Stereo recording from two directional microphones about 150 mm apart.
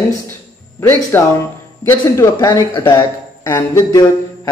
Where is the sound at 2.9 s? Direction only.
15° left (ahead or behind).